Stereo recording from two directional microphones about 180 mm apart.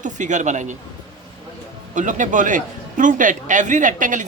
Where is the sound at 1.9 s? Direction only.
45° right (ahead or behind).